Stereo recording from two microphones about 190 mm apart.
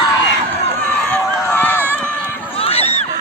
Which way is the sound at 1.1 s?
10° left (ahead or behind).